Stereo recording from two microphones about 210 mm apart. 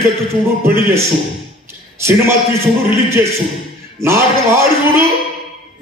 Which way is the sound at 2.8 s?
10° right (ahead or behind).